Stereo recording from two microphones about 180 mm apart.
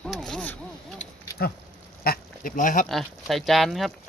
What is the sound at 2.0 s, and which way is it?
Speech, 55° left (ahead or behind).